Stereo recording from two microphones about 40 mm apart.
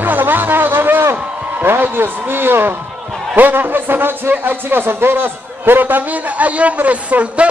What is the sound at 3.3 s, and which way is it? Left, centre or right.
A man's voice, right.